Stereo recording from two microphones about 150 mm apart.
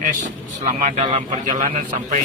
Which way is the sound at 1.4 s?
55° right (ahead or behind).